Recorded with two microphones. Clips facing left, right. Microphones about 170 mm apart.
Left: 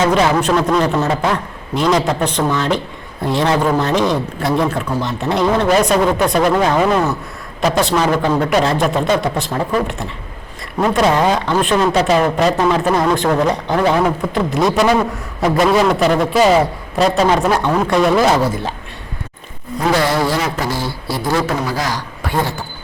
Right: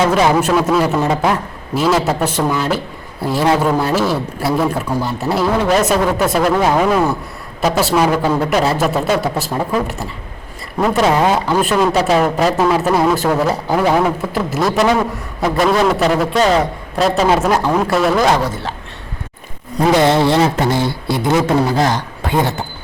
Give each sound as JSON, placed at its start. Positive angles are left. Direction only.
{"t": 0.1, "sound": "a man's voice", "side_deg": -5}
{"t": 20.0, "sound": "speech", "side_deg": -25}